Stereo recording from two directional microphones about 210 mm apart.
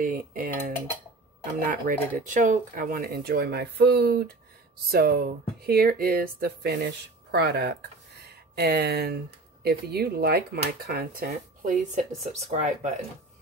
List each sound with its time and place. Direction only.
0.0 s dishes: 40° right (ahead or behind)
1.4 s speech: 40° right (ahead or behind)